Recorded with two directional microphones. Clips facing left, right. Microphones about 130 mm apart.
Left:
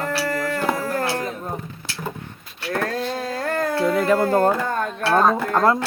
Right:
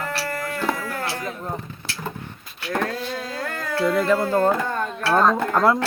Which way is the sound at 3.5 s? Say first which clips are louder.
Left 2 dB; 45° left (ahead or behind).